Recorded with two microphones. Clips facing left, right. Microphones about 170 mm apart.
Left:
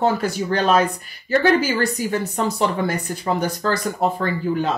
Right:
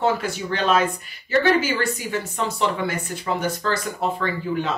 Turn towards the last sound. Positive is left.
turn(degrees=40)  # may be behind; listen again after turning